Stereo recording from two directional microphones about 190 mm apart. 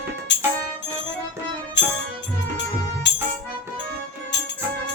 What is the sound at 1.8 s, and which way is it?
Music, 70° left (ahead or behind).